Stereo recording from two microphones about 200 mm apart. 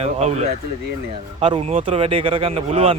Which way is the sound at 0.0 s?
35° right (ahead or behind).